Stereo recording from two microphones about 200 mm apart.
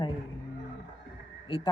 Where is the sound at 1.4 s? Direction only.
25° left (ahead or behind).